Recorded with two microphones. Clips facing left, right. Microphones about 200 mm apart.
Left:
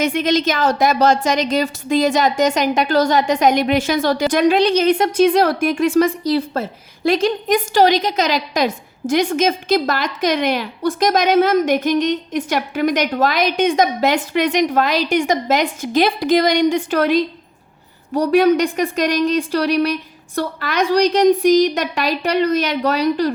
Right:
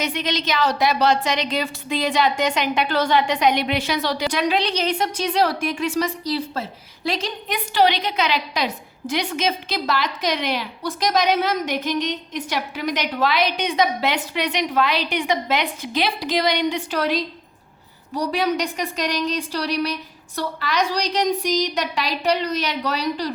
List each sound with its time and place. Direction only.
0.0 s a woman's voice: 50° left (ahead or behind)